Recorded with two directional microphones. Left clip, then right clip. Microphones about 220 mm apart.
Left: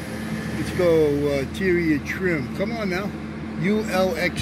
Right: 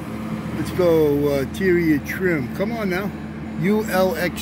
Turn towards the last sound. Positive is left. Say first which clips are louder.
# right 2 dB
turn(degrees=-15)  # may be behind; listen again after turning